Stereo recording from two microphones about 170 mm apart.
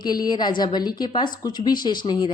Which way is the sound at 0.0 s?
25° left (ahead or behind).